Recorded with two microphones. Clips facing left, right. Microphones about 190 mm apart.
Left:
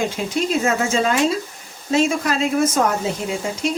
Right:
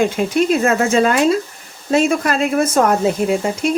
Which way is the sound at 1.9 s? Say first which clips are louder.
Right 3 dB; 55° right (ahead or behind).